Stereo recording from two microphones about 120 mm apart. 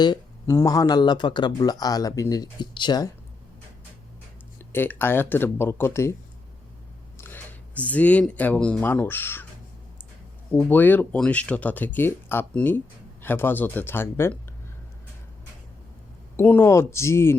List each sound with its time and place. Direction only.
0.4 s speech: 30° left (ahead or behind)
4.7 s speech: 20° left (ahead or behind)
7.2 s a sound: 15° left (ahead or behind)
7.9 s speech: 10° left (ahead or behind)
10.7 s speech: 15° left (ahead or behind)
16.4 s speech: 20° left (ahead or behind)